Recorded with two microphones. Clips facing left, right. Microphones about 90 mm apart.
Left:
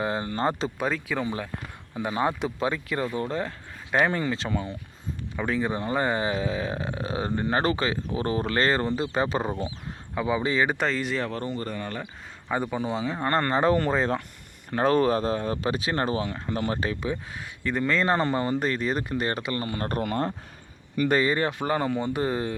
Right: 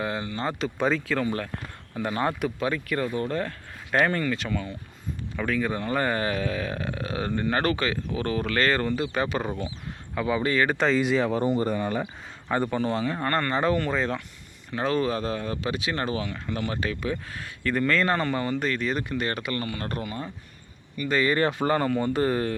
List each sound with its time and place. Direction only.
0.0 s a sound: 30° left (ahead or behind)
0.3 s speech: 40° left (ahead or behind)
0.8 s speech: 5° left (ahead or behind); by 10.8 s 20° left (ahead or behind)
10.8 s speech: centre (ahead or behind)
12.5 s speech: 5° left (ahead or behind)
13.2 s speech: 30° left (ahead or behind)
20.0 s speech: 60° left (ahead or behind)
21.3 s speech: 10° left (ahead or behind)